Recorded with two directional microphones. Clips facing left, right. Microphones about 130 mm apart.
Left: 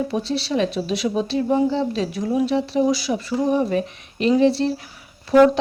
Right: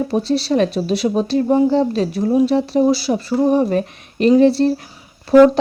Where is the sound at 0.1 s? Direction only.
40° right (ahead or behind).